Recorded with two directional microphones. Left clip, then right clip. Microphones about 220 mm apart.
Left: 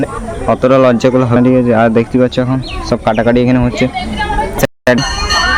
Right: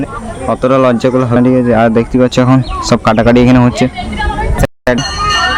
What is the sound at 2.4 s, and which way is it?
Speech, 25° right (ahead or behind).